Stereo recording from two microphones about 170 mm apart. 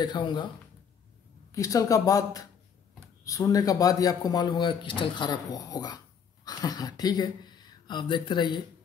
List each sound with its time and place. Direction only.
0.0 s a man's voice: 25° left (ahead or behind)
1.5 s a man's voice: 20° left (ahead or behind)